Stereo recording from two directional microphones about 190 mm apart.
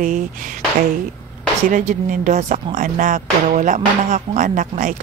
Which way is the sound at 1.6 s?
45° right (ahead or behind).